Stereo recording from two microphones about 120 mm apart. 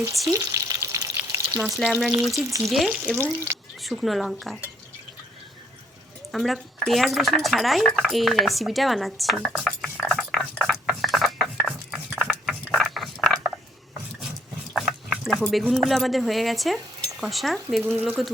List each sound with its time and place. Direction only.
0.3 s frying: 30° right (ahead or behind)
1.9 s speech: 5° left (ahead or behind)
3.2 s speech: 20° right (ahead or behind)
3.8 s speech: centre (ahead or behind)
6.3 s speech: centre (ahead or behind)
11.6 s a sound: 10° right (ahead or behind)
14.7 s a sound: centre (ahead or behind)
15.7 s speech: centre (ahead or behind)